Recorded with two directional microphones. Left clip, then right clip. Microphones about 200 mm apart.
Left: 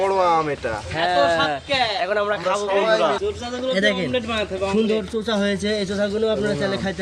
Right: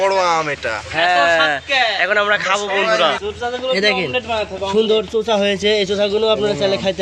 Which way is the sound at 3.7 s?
25° right (ahead or behind).